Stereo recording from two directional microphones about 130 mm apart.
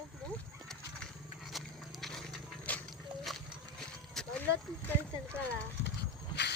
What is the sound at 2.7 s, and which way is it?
Horse, 10° left (ahead or behind).